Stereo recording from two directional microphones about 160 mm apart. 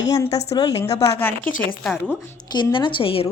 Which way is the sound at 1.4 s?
55° left (ahead or behind).